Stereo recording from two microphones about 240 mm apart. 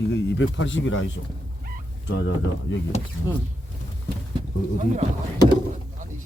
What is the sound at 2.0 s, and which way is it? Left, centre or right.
Speech, left.